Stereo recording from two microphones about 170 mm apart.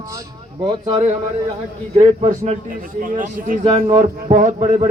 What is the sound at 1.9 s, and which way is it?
A man's voice, 40° right (ahead or behind).